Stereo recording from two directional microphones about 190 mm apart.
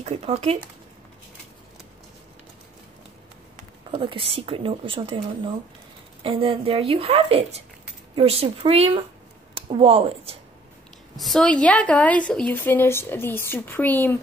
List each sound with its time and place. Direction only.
0.0 s speech: 35° right (ahead or behind)
3.9 s speech: 25° right (ahead or behind)
9.5 s a sound: 30° right (ahead or behind)
11.1 s a woman's voice: centre (ahead or behind)